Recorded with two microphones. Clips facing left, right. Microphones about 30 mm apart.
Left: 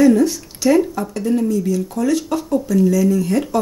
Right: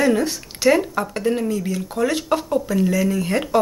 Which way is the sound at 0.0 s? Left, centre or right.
Right.